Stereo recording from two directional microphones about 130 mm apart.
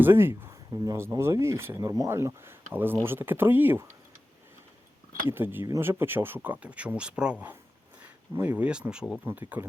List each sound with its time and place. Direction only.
0.0 s speech: 15° right (ahead or behind)
5.3 s speech: 15° right (ahead or behind)